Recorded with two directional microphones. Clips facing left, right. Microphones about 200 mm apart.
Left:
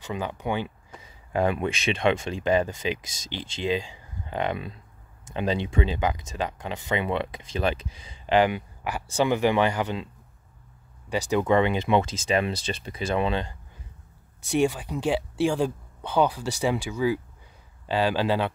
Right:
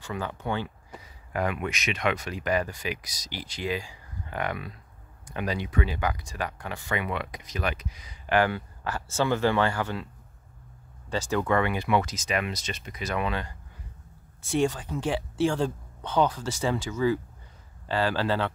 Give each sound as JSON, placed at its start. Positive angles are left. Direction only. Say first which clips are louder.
{"t": 0.0, "sound": "speech", "louder": "left 2 dB", "side_deg": 20}
{"t": 1.3, "sound": "speech", "louder": "left 5 dB", "side_deg": 30}
{"t": 11.1, "sound": "speech", "louder": "left 3 dB", "side_deg": 15}
{"t": 14.5, "sound": "speech", "louder": "left 2 dB", "side_deg": 15}